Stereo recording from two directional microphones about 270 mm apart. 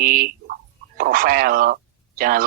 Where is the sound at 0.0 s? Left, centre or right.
Right.